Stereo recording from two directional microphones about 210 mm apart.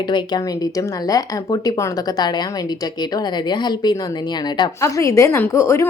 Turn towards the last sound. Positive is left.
turn(degrees=15)  # may be behind; listen again after turning